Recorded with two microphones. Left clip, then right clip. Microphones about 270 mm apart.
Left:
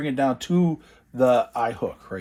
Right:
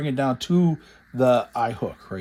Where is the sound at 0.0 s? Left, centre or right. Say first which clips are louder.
Left 1 dB; right.